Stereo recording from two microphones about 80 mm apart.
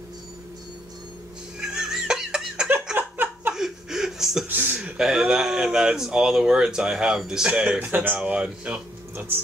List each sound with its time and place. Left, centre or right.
1.6 s giggle: centre
3.0 s a sound: right
3.5 s chuckle: centre
4.5 s speech: right
4.8 s speech: centre
7.9 s speech: right